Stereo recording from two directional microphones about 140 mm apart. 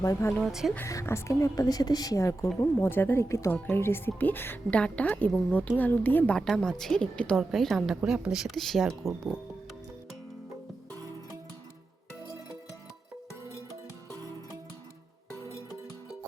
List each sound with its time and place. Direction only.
0.0 s a woman's voice: 20° left (ahead or behind)
0.3 s a woman's voice: centre (ahead or behind)
0.7 s a woman's voice: 20° left (ahead or behind); by 9.3 s centre (ahead or behind)